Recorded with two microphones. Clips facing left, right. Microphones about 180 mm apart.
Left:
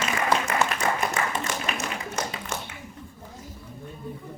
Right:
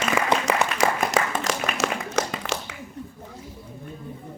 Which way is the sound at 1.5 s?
80° right.